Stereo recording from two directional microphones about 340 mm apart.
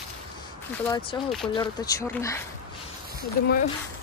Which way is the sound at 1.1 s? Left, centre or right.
Centre.